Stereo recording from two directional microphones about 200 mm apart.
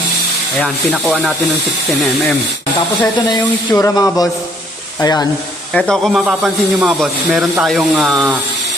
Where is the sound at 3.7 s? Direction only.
15° left (ahead or behind).